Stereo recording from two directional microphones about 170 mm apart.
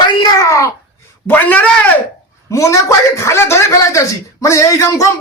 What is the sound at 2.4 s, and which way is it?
A woman's voice, 15° left (ahead or behind).